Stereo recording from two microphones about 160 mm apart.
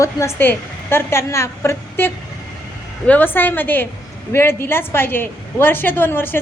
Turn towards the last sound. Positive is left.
turn(degrees=10)  # may be behind; listen again after turning